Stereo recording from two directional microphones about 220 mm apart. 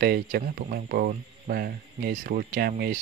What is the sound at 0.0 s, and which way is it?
Speech, 40° right (ahead or behind).